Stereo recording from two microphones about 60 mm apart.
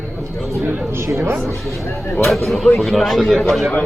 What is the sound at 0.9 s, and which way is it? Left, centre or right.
Speech, right.